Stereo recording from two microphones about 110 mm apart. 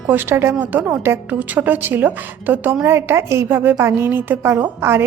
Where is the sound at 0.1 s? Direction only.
20° right (ahead or behind).